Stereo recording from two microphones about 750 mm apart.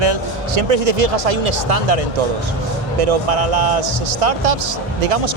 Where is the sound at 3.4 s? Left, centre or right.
Right.